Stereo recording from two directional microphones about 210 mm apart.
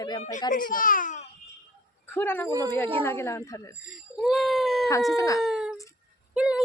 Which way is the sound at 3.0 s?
10° left (ahead or behind).